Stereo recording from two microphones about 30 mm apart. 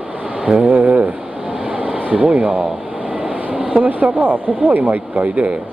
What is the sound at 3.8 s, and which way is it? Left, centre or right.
Speech, right.